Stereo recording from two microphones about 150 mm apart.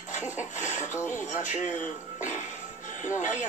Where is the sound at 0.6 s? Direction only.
55° left (ahead or behind).